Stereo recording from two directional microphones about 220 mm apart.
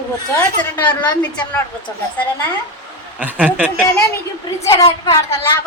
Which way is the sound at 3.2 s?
5° right (ahead or behind).